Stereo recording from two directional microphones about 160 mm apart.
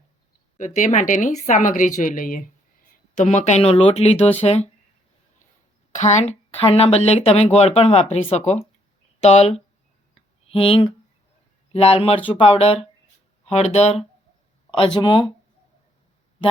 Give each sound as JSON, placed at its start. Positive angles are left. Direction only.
{"t": 0.5, "sound": "speech", "side_deg": 50}
{"t": 3.2, "sound": "speech", "side_deg": 45}
{"t": 5.9, "sound": "speech", "side_deg": 45}
{"t": 14.8, "sound": "speech", "side_deg": 30}